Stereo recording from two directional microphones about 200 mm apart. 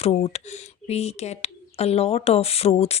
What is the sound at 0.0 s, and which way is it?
Speech, 30° left (ahead or behind).